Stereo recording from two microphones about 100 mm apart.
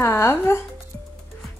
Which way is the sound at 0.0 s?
25° left (ahead or behind).